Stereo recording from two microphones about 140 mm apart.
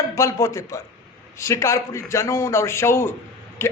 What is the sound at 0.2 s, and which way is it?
A man's voice, 20° left (ahead or behind).